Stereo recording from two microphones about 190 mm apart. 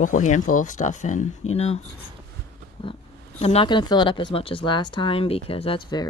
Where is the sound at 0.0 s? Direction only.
40° left (ahead or behind).